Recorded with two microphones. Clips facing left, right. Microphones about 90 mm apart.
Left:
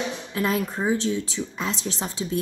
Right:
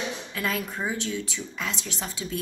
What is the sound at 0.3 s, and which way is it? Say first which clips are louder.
A woman's voice: left 7 dB; 25° left (ahead or behind).